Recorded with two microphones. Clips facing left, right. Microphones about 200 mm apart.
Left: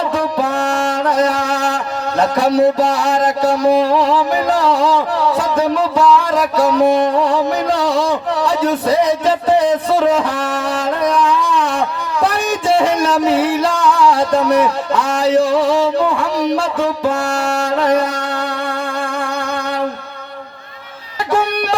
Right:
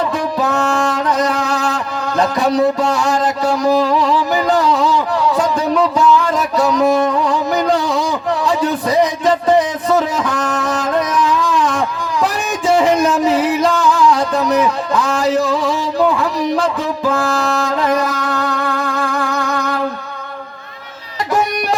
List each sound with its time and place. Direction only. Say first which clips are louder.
2.4 s a sound: left 3 dB; 30° left (ahead or behind)
5.4 s music: right 1 dB; 30° left (ahead or behind)
10.2 s music: even; 30° left (ahead or behind)
14.0 s music: left 4 dB; 30° left (ahead or behind)
14.9 s a sound: left 3 dB; 30° left (ahead or behind)
18.1 s music: right 2 dB; 30° left (ahead or behind)